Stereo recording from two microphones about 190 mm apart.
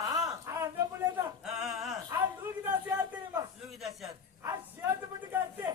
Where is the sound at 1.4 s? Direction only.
5° right (ahead or behind).